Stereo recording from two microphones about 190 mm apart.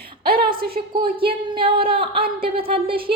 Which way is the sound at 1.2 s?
25° right (ahead or behind).